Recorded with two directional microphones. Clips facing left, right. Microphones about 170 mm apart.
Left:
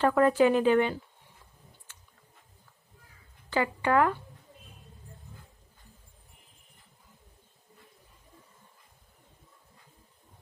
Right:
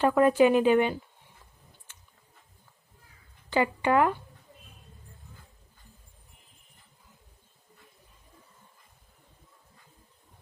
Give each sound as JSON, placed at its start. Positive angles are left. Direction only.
{"t": 0.0, "sound": "a woman's voice", "side_deg": -15}
{"t": 3.5, "sound": "a woman's voice", "side_deg": -20}